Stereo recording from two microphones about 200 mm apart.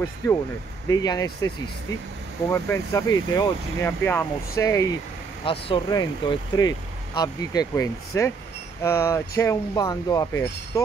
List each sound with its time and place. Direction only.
0.8 s speech: 20° left (ahead or behind)
2.5 s speech: 15° left (ahead or behind)
4.0 s speech: 10° left (ahead or behind)
5.4 s speech: 25° left (ahead or behind)